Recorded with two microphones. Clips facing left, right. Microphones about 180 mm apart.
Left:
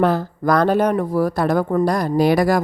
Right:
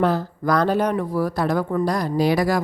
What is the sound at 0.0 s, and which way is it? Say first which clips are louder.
Speech: left 3 dB; 55° left (ahead or behind).